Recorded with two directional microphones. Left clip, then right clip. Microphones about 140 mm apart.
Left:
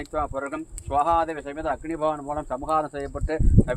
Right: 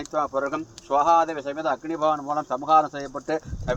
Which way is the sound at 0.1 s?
15° left (ahead or behind).